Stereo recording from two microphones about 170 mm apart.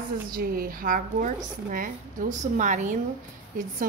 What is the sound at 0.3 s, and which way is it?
A woman's voice, 60° right (ahead or behind).